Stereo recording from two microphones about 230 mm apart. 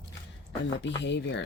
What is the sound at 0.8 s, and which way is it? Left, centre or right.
Speech, left.